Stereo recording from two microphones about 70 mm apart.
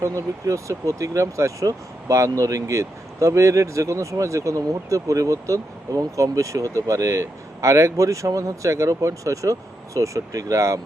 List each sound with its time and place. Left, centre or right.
0.0 s speech: right